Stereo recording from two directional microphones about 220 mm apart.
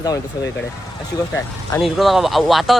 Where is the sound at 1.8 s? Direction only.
Centre (ahead or behind).